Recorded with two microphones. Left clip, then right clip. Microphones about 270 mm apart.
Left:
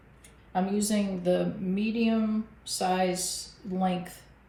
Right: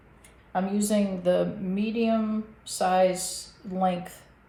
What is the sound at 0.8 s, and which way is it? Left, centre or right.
Speech, centre.